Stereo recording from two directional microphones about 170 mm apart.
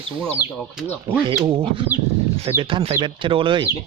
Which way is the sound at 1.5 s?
30° right (ahead or behind).